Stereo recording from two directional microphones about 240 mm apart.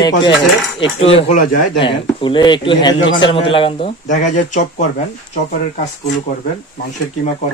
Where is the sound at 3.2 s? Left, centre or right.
Left.